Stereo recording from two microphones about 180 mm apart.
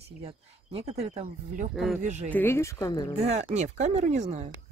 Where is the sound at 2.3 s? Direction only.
10° left (ahead or behind).